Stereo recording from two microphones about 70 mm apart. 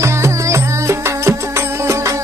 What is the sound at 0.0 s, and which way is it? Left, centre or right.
Music, right.